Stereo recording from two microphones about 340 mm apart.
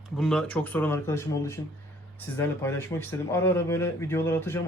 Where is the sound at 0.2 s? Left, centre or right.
Centre.